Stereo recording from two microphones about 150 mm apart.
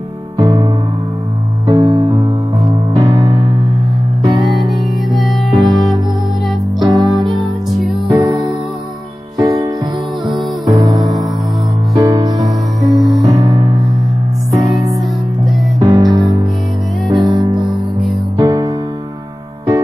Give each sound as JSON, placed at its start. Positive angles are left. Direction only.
{"t": 0.4, "sound": "music", "side_deg": -25}
{"t": 1.7, "sound": "music", "side_deg": -35}
{"t": 2.9, "sound": "music", "side_deg": -25}
{"t": 4.6, "sound": "music", "side_deg": 0}
{"t": 6.9, "sound": "music", "side_deg": -30}
{"t": 7.3, "sound": "music", "side_deg": 0}
{"t": 8.1, "sound": "music", "side_deg": -30}
{"t": 12.9, "sound": "music", "side_deg": 0}
{"t": 13.2, "sound": "music", "side_deg": -25}
{"t": 17.1, "sound": "music", "side_deg": 0}
{"t": 18.3, "sound": "music", "side_deg": -25}